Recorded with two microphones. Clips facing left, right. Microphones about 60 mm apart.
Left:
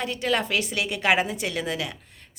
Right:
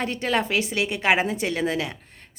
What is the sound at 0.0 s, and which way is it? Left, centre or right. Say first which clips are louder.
Speech: right 1 dB; right.